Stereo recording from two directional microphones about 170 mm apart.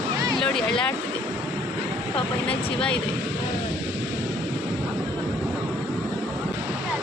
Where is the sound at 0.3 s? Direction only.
5° left (ahead or behind).